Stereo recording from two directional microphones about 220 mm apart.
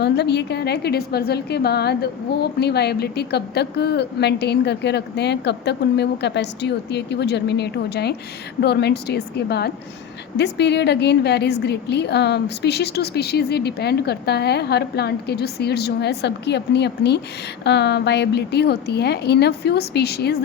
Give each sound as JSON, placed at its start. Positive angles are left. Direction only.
{"t": 0.0, "sound": "a woman's voice", "side_deg": 50}